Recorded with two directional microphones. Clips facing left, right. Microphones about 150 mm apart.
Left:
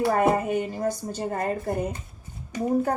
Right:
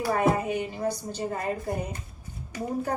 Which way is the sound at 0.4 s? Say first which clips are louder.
Left 3 dB; 45° left (ahead or behind).